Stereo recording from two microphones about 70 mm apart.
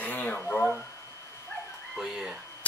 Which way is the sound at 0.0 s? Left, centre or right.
Left.